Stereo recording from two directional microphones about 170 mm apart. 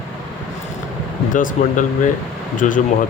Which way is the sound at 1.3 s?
50° left (ahead or behind).